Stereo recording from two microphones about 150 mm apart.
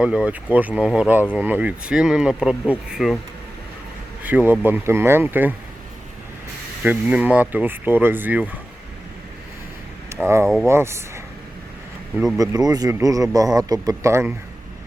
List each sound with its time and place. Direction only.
0.0 s speech: 5° right (ahead or behind)
4.2 s speech: 10° right (ahead or behind)
6.8 s speech: 10° right (ahead or behind)
10.1 s speech: 15° right (ahead or behind)
10.4 s speech: centre (ahead or behind)
10.7 s speech: 20° right (ahead or behind)
12.4 s speech: 25° right (ahead or behind)